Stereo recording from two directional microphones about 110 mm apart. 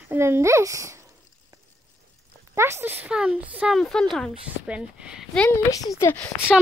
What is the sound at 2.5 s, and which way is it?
Speech, 20° right (ahead or behind).